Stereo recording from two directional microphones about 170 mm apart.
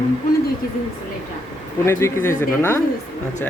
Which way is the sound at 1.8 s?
15° left (ahead or behind).